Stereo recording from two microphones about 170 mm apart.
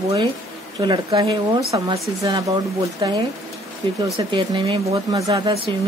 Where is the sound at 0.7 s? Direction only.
25° right (ahead or behind).